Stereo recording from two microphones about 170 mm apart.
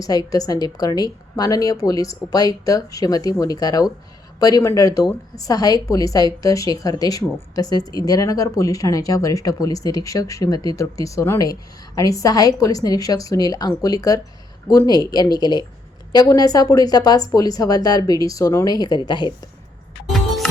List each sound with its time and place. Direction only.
0.0 s a woman's voice: 20° left (ahead or behind)
20.1 s music: centre (ahead or behind)